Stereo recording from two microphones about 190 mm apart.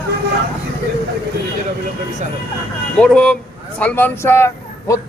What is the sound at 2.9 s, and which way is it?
A man's voice, 5° left (ahead or behind).